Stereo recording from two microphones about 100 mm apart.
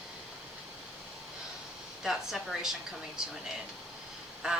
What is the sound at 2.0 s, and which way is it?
Speech, 5° right (ahead or behind).